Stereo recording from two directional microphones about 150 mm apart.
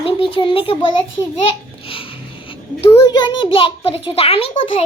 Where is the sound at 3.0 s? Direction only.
30° left (ahead or behind).